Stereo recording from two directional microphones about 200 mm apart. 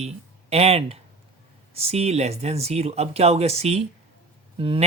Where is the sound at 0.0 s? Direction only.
30° right (ahead or behind).